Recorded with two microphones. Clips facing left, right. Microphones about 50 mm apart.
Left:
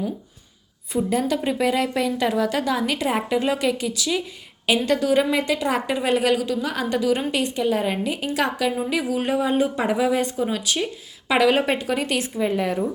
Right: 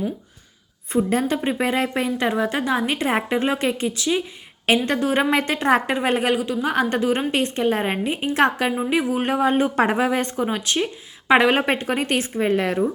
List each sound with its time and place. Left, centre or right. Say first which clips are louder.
0.9 s a woman's voice: right 1 dB; right
10.4 s a woman's voice: right 1 dB; right